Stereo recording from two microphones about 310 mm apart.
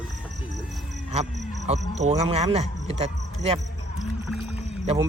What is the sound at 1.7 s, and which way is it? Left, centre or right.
Speech, right.